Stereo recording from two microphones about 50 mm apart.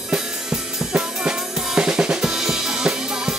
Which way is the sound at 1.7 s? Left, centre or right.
Centre.